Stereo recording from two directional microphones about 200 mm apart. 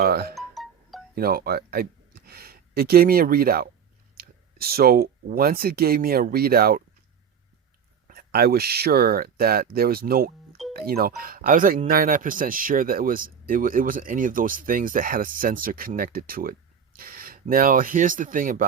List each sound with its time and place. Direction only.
0.0 s speech: 50° right (ahead or behind)
0.3 s music: centre (ahead or behind)
1.1 s speech: 50° right (ahead or behind)
8.0 s speech: 50° right (ahead or behind)